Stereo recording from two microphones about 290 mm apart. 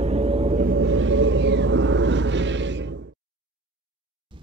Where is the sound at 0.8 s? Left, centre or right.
Right.